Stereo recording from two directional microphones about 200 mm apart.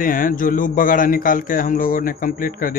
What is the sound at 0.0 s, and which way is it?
Speech, 45° left (ahead or behind).